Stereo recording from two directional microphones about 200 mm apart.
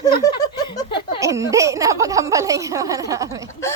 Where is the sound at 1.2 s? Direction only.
15° right (ahead or behind).